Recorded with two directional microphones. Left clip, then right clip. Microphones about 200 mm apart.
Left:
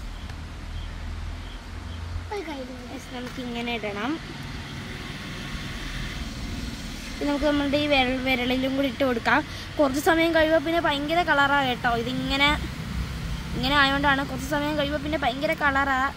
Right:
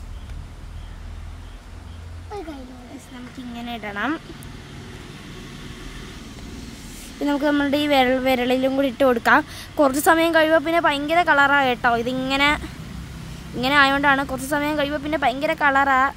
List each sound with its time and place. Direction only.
3.5 s speech: 30° right (ahead or behind)
7.2 s speech: 55° right (ahead or behind)